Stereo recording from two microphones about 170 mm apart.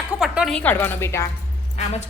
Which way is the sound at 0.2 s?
Centre (ahead or behind).